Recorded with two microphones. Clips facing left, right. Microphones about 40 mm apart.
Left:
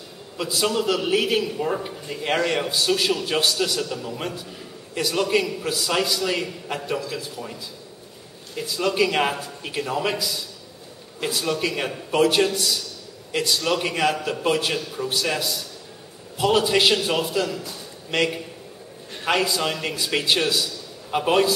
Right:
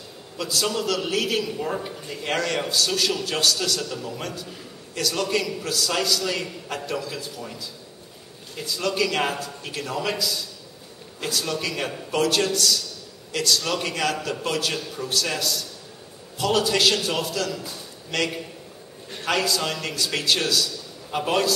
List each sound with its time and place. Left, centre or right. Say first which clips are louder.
0.4 s a man's voice: left 2 dB; centre
8.5 s a man's voice: left 3 dB; centre